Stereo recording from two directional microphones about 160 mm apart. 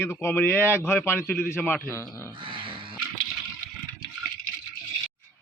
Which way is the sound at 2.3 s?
30° right (ahead or behind).